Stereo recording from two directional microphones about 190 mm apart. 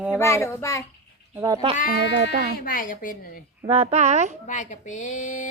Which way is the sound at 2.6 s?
45° left (ahead or behind).